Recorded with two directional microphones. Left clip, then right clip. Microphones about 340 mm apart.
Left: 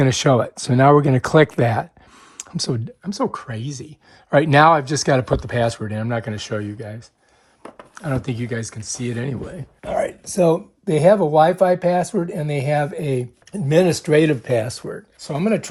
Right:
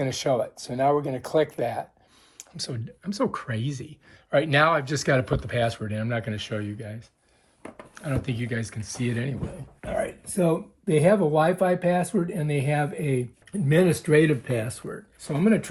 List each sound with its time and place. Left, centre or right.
0.0 s speech: left